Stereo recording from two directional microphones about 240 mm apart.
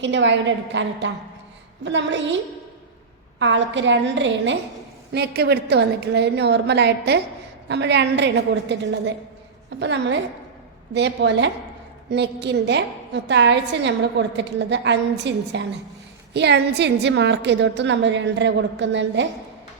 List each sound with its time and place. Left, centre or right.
0.0 s a woman's voice: right